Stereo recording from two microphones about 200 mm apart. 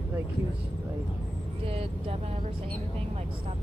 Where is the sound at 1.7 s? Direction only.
30° right (ahead or behind).